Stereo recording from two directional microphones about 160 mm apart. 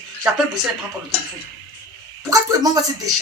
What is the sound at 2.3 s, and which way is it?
Speech, 25° right (ahead or behind).